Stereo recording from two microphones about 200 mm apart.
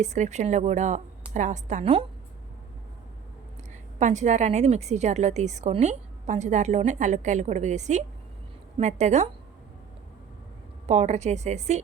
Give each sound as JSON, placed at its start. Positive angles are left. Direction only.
{"t": 0.0, "sound": "a woman's voice", "side_deg": -35}
{"t": 4.0, "sound": "a woman's voice", "side_deg": -35}
{"t": 10.8, "sound": "a woman's voice", "side_deg": -35}